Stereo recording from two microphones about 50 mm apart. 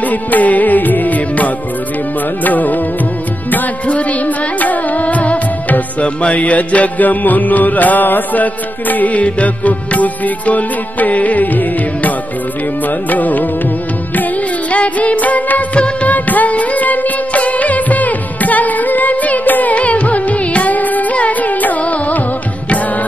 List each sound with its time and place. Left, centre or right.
0.1 s music: left
13.1 s music: left
14.7 s music: left